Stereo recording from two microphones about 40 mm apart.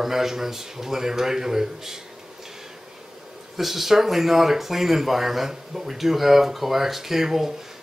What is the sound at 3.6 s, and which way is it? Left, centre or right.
Speech, centre.